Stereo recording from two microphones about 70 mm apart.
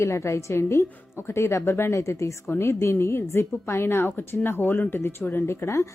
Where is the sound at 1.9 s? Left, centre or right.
Left.